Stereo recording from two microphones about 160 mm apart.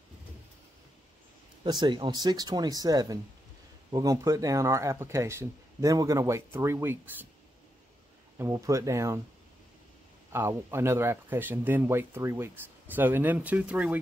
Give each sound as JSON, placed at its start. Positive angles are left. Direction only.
{"t": 1.6, "sound": "speech", "side_deg": -30}
{"t": 8.4, "sound": "speech", "side_deg": -20}
{"t": 10.3, "sound": "speech", "side_deg": -15}